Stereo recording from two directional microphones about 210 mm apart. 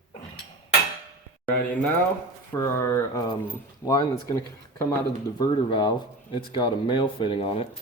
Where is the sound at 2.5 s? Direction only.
15° left (ahead or behind).